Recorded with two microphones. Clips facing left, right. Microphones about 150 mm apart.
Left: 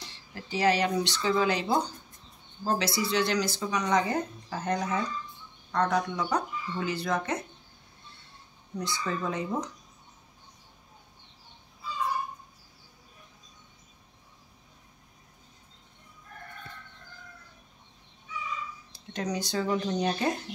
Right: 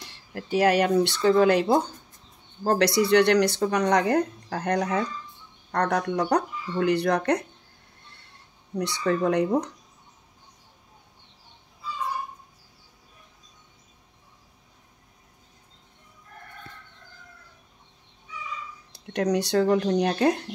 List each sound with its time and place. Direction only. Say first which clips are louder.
0.0 s speech: right 6 dB; 60° right (ahead or behind)
8.7 s speech: right 7 dB; 70° right (ahead or behind)
18.9 s speech: right 9 dB; 65° right (ahead or behind)